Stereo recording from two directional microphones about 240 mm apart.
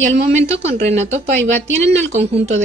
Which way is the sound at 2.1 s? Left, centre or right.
Right.